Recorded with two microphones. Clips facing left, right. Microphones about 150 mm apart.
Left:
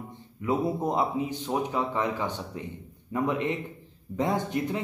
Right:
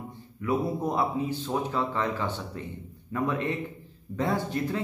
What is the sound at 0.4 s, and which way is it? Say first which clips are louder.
A man's voice: left 1 dB; 20° left (ahead or behind).